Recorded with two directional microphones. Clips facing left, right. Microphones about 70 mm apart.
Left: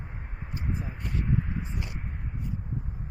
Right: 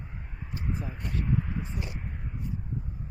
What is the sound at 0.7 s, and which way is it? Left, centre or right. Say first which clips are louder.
Speech: even; centre.